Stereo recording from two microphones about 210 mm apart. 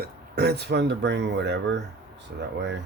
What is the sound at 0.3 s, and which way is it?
Speech, 50° right (ahead or behind).